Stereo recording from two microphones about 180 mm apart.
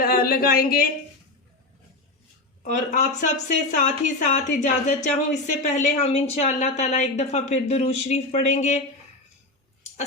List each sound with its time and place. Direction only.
0.0 s speech: 55° left (ahead or behind)
2.6 s speech: 45° left (ahead or behind)